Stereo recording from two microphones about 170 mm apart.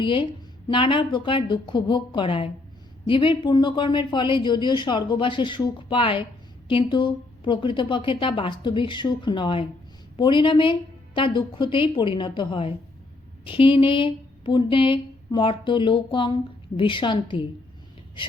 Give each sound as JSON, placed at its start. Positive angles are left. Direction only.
{"t": 0.0, "sound": "speech", "side_deg": 30}